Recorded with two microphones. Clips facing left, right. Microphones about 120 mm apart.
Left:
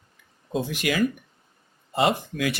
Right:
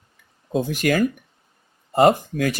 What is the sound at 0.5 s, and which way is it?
Speech, 45° right (ahead or behind).